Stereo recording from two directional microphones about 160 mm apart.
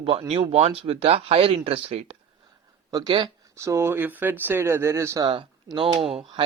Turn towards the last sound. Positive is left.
turn(degrees=-35)  # may be behind; listen again after turning